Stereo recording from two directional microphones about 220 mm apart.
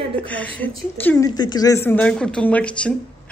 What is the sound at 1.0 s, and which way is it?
A woman's voice, 15° left (ahead or behind).